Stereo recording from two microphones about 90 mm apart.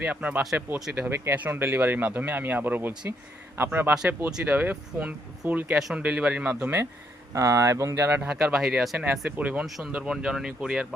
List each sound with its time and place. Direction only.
0.0 s speech: 15° right (ahead or behind)
7.3 s speech: 35° right (ahead or behind)
7.9 s speech: 20° right (ahead or behind)
8.3 s speech: 10° right (ahead or behind)
9.2 s speech: 15° right (ahead or behind)
9.6 s speech: centre (ahead or behind)